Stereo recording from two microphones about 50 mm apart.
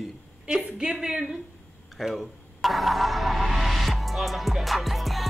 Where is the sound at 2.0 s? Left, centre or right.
Centre.